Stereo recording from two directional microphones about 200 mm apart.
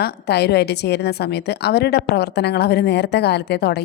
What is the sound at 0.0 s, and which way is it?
A woman's voice, 55° left (ahead or behind).